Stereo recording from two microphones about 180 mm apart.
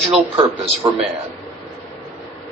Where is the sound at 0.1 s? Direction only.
30° right (ahead or behind).